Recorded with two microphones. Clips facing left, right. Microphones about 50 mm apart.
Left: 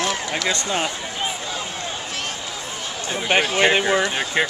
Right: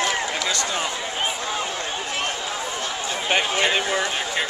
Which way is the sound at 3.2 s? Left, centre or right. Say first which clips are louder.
Left 4 dB; centre.